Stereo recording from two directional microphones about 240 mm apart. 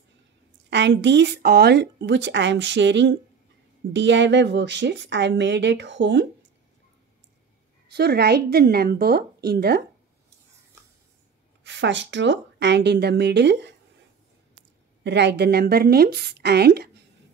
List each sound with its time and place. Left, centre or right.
0.7 s a woman's voice: right
7.9 s speech: right
11.6 s a woman's voice: right
15.0 s a woman's voice: right